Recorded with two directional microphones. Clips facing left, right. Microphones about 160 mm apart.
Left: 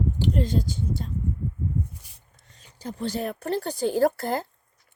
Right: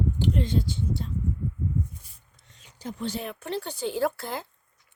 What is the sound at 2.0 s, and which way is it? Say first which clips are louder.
Dog: left 2 dB; 80° left.